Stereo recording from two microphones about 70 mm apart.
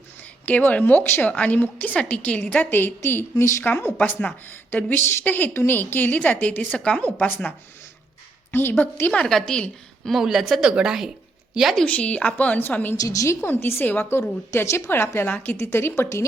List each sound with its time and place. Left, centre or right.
0.4 s a woman's voice: left
6.7 s a woman's voice: centre
7.0 s a woman's voice: left
8.8 s a woman's voice: left
9.1 s a woman's voice: centre
10.1 s speech: centre
11.9 s a woman's voice: left
13.0 s a woman's voice: left
13.4 s a woman's voice: left